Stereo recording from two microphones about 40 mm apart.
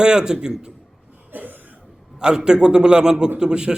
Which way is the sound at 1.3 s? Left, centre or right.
Right.